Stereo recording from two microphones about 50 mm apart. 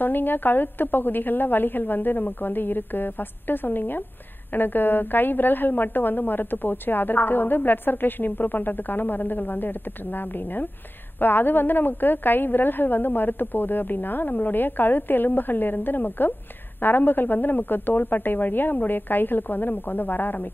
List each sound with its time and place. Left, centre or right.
0.0 s a woman's voice: left